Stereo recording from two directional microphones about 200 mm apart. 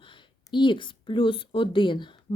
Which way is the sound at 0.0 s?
25° left (ahead or behind).